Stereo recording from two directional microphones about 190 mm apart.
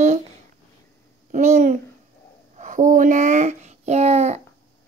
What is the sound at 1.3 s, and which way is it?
A child's voice, 40° right (ahead or behind).